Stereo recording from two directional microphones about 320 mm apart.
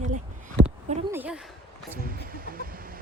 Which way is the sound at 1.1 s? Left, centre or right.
Centre.